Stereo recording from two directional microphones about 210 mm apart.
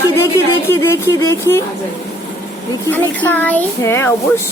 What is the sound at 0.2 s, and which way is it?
Speech, 15° left (ahead or behind).